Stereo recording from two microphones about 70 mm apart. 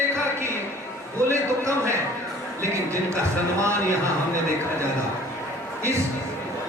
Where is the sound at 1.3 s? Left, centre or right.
Right.